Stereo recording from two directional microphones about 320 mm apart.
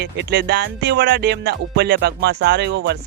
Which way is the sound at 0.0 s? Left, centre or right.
Right.